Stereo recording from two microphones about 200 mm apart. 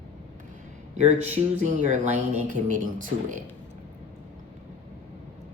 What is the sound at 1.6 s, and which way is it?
Speech, 40° right (ahead or behind).